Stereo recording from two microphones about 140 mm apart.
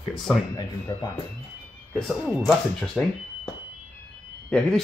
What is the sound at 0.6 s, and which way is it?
Speech, 25° left (ahead or behind).